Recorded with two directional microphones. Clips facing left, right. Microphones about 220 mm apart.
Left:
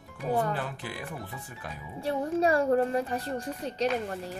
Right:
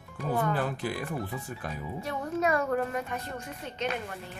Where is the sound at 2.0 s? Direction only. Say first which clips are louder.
Left 4 dB; 30° left (ahead or behind).